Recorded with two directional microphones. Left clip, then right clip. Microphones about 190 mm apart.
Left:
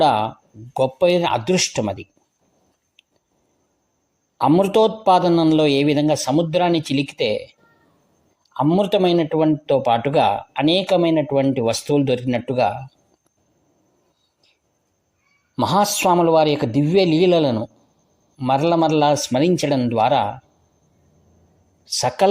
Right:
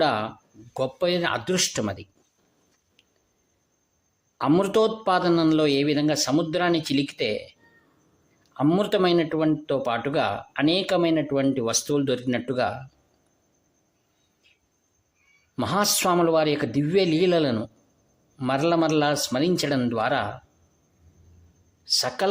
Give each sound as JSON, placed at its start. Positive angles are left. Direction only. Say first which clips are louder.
{"t": 0.0, "sound": "speech", "louder": "left 7 dB", "side_deg": 15}
{"t": 4.4, "sound": "speech", "louder": "left 6 dB", "side_deg": 15}
{"t": 15.5, "sound": "a woman's voice", "louder": "left 6 dB", "side_deg": 15}
{"t": 21.8, "sound": "a woman's voice", "louder": "left 6 dB", "side_deg": 25}